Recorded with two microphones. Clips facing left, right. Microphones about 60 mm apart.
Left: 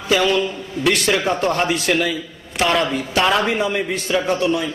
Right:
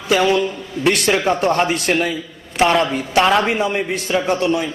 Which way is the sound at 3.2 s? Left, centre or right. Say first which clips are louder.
Right 3 dB; centre.